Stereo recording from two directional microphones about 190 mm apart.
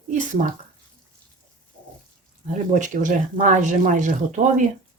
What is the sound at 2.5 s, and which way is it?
Speech, 40° right (ahead or behind).